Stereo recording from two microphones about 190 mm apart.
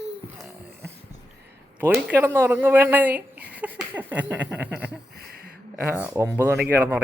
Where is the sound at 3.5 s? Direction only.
5° right (ahead or behind).